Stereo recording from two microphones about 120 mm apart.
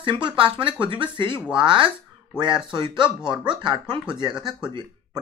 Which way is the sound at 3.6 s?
40° right (ahead or behind).